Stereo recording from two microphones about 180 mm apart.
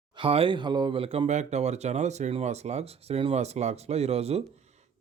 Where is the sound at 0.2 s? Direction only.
30° right (ahead or behind).